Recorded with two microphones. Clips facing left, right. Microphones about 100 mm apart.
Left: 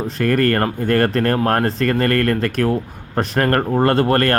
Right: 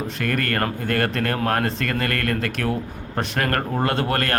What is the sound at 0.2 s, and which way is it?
Speech, 40° left (ahead or behind).